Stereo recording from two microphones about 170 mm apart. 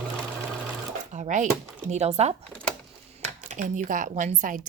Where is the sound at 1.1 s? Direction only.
45° right (ahead or behind).